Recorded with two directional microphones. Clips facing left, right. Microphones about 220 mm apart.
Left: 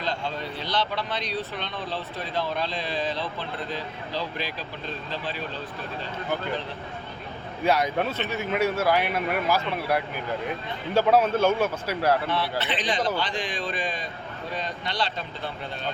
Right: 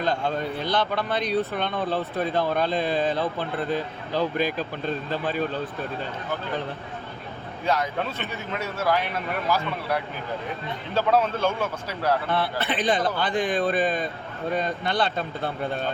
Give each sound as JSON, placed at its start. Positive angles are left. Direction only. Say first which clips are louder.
{"t": 0.0, "sound": "speech", "louder": "right 5 dB", "side_deg": -50}
{"t": 7.6, "sound": "speech", "louder": "left 2 dB", "side_deg": 10}
{"t": 12.3, "sound": "speech", "louder": "right 2 dB", "side_deg": -55}